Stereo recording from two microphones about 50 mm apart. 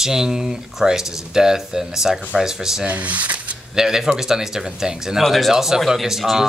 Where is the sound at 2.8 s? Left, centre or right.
Right.